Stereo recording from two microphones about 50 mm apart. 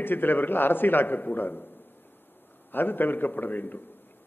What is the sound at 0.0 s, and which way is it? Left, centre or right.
A man's voice, left.